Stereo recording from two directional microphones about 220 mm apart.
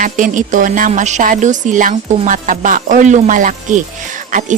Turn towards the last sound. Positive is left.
turn(degrees=-35)  # may be behind; listen again after turning